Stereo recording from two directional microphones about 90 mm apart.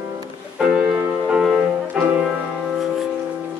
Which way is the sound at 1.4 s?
5° right (ahead or behind).